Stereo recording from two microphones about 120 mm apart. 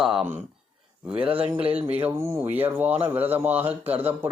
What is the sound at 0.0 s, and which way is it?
Speech, 5° right (ahead or behind).